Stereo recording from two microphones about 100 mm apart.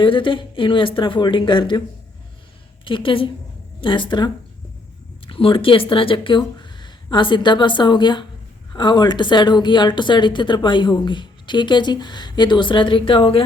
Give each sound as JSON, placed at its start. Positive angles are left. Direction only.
{"t": 0.0, "sound": "speech", "side_deg": 55}
{"t": 2.8, "sound": "a woman's voice", "side_deg": 60}
{"t": 5.2, "sound": "a woman's voice", "side_deg": 60}